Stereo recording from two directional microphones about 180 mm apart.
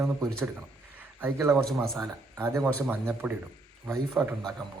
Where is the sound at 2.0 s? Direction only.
15° right (ahead or behind).